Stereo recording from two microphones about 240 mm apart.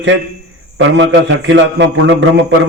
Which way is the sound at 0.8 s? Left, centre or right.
Right.